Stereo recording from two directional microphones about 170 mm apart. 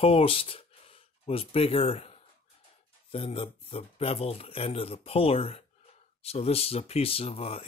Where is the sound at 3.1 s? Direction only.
35° left (ahead or behind).